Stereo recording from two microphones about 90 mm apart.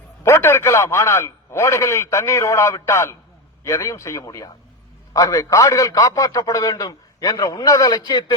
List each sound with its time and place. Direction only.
0.2 s a man's voice: 30° left (ahead or behind); by 8.2 s 50° left (ahead or behind)